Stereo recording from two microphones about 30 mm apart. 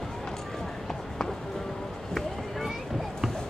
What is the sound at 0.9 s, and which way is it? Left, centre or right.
Run, centre.